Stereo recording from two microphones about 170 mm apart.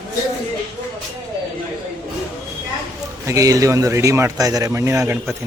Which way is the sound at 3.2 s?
20° right (ahead or behind).